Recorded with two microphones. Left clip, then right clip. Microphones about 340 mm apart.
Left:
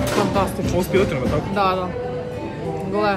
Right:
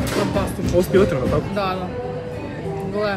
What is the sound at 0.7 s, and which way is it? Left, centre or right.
Speech, centre.